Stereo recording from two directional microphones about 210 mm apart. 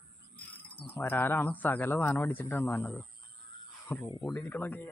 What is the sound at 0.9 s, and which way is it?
Speech, 10° left (ahead or behind).